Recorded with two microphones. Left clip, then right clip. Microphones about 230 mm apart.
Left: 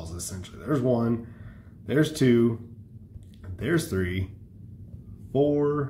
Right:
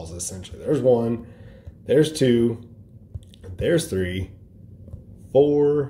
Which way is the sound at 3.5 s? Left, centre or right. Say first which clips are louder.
Right 6 dB; centre.